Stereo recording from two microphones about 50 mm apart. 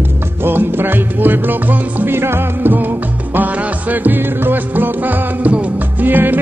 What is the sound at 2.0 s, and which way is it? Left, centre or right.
Music, right.